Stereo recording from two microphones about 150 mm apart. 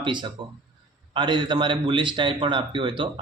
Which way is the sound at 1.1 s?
30° right (ahead or behind).